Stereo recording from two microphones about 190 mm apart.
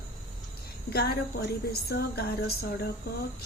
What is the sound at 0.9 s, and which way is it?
A woman's voice, 55° left (ahead or behind).